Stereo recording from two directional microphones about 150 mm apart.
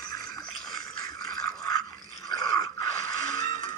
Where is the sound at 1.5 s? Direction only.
25° left (ahead or behind).